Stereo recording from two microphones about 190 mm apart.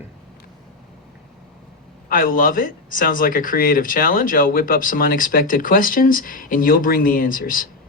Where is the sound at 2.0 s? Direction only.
45° left (ahead or behind).